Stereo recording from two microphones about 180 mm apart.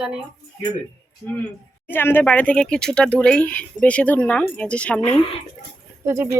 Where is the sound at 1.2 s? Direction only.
15° left (ahead or behind).